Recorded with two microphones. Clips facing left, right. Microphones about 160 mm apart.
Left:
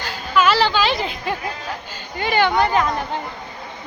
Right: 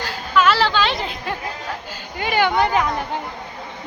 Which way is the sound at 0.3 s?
Centre (ahead or behind).